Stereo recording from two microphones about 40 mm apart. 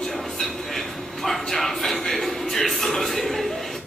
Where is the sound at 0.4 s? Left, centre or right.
Centre.